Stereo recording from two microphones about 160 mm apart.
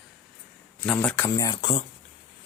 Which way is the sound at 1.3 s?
20° left (ahead or behind).